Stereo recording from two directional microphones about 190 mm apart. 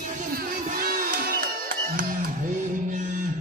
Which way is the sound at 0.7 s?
50° right (ahead or behind).